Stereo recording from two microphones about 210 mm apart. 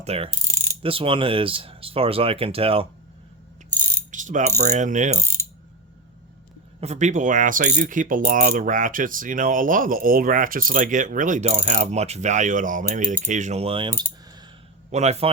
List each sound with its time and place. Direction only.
0.0 s mechanisms: 30° right (ahead or behind)
0.8 s speech: 25° right (ahead or behind)
4.1 s mechanisms: 35° right (ahead or behind)
6.7 s mechanisms: 30° right (ahead or behind)
14.8 s a man's voice: 30° right (ahead or behind)